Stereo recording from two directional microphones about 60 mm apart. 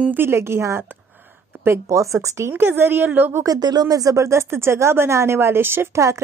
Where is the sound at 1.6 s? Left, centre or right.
Right.